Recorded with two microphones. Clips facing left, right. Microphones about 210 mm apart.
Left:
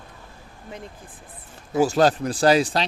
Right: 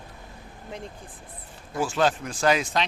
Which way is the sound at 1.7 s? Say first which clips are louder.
Left 6 dB; 40° left (ahead or behind).